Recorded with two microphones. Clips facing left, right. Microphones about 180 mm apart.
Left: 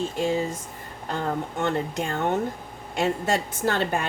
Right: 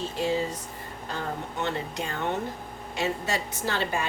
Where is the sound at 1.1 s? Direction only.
50° left (ahead or behind).